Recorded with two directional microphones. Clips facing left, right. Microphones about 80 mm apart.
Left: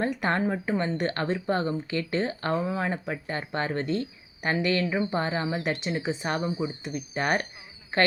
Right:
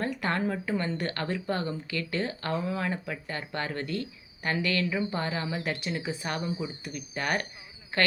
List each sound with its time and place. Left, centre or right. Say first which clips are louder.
0.0 s a woman's voice: left 3 dB; left